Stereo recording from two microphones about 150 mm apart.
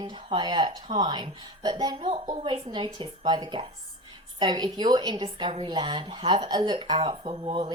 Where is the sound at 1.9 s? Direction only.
40° right (ahead or behind).